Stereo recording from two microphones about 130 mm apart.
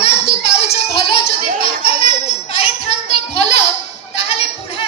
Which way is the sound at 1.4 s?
90° right.